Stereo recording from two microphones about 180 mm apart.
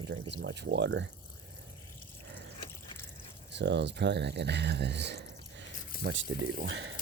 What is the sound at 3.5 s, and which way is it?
Speech, 75° right (ahead or behind).